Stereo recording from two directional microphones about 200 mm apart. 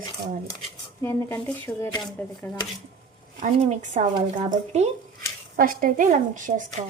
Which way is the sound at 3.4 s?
35° right (ahead or behind).